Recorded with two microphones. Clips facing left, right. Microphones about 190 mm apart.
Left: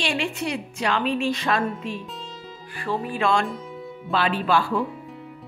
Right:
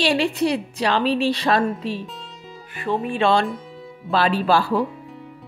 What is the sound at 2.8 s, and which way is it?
A woman's voice, 20° right (ahead or behind).